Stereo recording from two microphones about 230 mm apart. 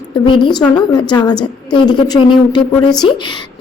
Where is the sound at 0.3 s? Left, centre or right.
Left.